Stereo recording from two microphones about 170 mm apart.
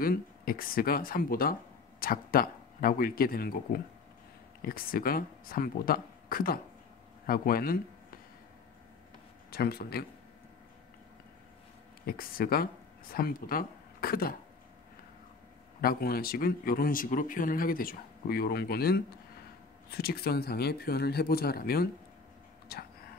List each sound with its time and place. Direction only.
0.0 s speech: 60° left (ahead or behind)
9.5 s speech: 65° left (ahead or behind)
12.1 s speech: 60° left (ahead or behind)
15.8 s speech: 60° left (ahead or behind)